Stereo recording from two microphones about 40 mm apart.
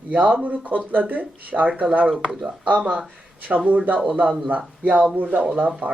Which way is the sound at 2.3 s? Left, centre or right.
Right.